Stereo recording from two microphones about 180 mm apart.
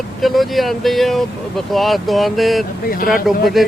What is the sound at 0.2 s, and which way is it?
Speech, centre (ahead or behind).